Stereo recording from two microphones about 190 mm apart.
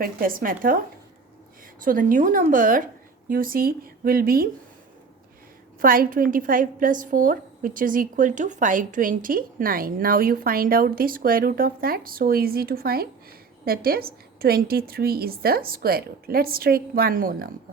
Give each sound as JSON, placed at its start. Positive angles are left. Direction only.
{"t": 0.0, "sound": "a woman's voice", "side_deg": -50}
{"t": 1.8, "sound": "a woman's voice", "side_deg": -45}
{"t": 5.8, "sound": "a woman's voice", "side_deg": -50}